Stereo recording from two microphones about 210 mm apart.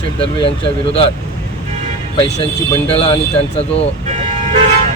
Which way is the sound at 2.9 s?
30° left (ahead or behind).